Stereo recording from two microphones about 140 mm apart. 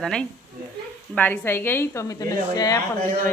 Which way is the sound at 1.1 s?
15° left (ahead or behind).